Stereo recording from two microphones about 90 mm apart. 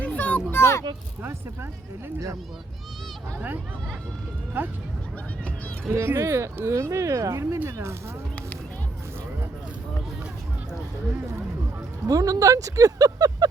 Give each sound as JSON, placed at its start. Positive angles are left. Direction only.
{"t": 0.0, "sound": "a sound", "side_deg": 15}
{"t": 0.5, "sound": "speech", "side_deg": 30}
{"t": 4.6, "sound": "speech", "side_deg": -20}
{"t": 5.9, "sound": "speech", "side_deg": -25}
{"t": 12.0, "sound": "speech", "side_deg": -40}